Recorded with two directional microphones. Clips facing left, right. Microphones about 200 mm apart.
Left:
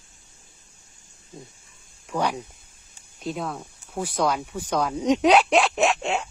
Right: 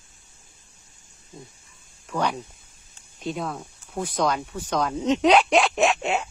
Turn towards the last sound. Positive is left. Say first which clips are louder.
# right 1 dB
turn(degrees=-5)  # may be behind; listen again after turning